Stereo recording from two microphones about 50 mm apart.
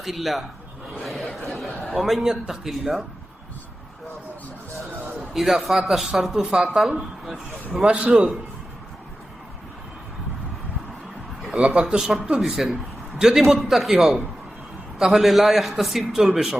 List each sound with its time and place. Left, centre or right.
0.0 s a man's voice: centre
5.3 s a man's voice: centre
7.7 s a man's voice: right
11.6 s a man's voice: right
11.9 s a man's voice: centre